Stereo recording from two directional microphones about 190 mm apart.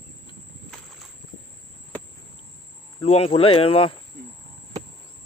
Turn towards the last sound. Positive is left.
turn(degrees=30)  # may be behind; listen again after turning